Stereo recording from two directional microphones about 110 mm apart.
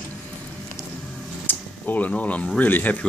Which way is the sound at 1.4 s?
15° left (ahead or behind).